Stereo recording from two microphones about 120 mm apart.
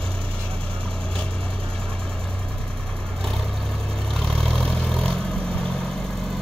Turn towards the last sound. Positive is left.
turn(degrees=10)  # may be behind; listen again after turning